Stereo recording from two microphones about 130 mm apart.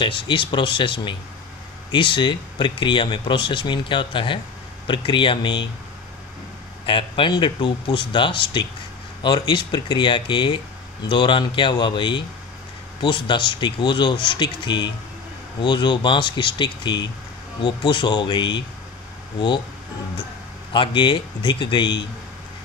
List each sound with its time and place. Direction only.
0.0 s speech: 40° left (ahead or behind)
6.9 s speech: 40° left (ahead or behind)
20.7 s speech: 40° left (ahead or behind)